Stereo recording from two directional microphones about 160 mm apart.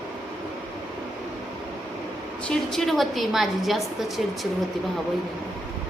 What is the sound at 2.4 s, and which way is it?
A woman's voice, centre (ahead or behind).